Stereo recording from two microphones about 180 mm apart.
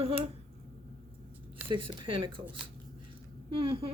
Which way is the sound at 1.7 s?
25° right (ahead or behind).